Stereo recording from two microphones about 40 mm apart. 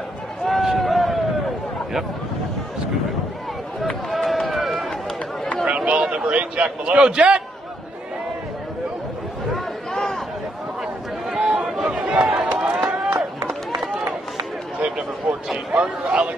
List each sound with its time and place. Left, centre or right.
0.5 s a sound: centre
4.1 s run: centre
5.9 s a man's voice: right
11.2 s a sound: centre
11.8 s chatter: right
12.6 s run: centre
13.5 s run: centre
15.3 s speech: right